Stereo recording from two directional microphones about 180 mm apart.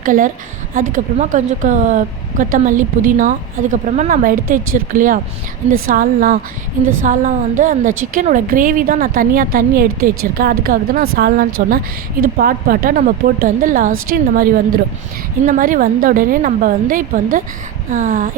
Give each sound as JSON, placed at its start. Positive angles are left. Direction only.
{"t": 0.0, "sound": "a woman's voice", "side_deg": -45}